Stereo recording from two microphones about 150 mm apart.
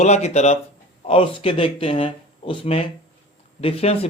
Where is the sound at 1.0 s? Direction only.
35° left (ahead or behind).